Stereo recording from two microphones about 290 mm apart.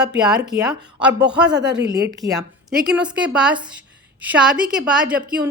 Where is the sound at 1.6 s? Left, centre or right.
Right.